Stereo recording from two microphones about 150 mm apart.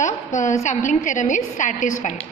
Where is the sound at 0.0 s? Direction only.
55° left (ahead or behind).